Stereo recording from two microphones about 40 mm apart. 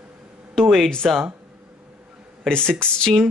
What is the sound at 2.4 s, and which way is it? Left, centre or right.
Speech, left.